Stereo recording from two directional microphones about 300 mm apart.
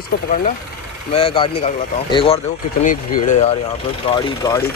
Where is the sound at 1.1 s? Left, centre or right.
Centre.